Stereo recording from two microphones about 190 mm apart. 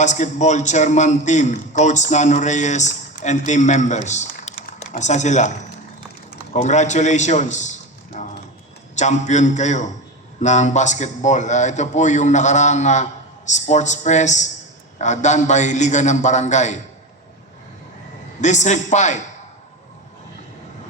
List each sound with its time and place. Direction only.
0.0 s a man's voice: 40° left (ahead or behind)
18.3 s a man's voice: 40° left (ahead or behind)